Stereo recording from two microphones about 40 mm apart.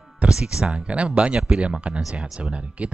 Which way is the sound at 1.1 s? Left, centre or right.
Right.